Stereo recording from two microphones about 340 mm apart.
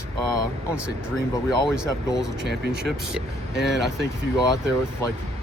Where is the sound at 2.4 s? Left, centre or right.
Right.